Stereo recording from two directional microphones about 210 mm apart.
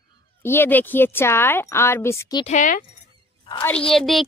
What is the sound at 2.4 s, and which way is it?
Speech, 35° left (ahead or behind).